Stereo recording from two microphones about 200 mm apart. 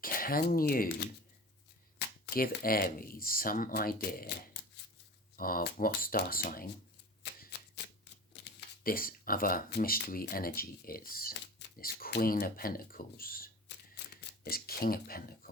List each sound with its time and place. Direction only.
0.0 s speech: 45° left (ahead or behind)
5.4 s speech: 45° left (ahead or behind)
8.8 s speech: 45° left (ahead or behind)